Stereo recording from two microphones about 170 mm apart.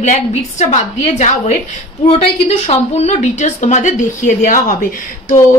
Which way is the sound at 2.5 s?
40° left (ahead or behind).